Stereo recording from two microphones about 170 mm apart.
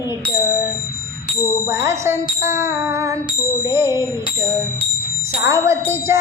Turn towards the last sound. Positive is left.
turn(degrees=-15)  # may be behind; listen again after turning